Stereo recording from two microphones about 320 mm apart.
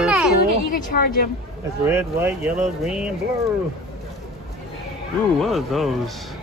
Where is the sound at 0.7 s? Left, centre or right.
Left.